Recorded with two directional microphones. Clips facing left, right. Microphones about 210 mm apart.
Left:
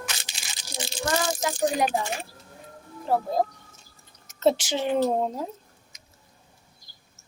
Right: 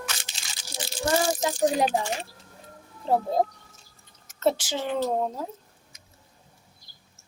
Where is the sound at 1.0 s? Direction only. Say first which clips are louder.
Right 2 dB; 20° right (ahead or behind).